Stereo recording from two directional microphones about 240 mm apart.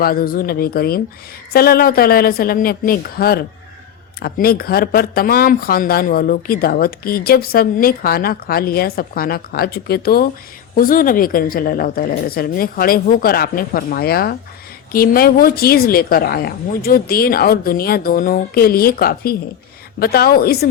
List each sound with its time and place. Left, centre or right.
0.0 s speech: left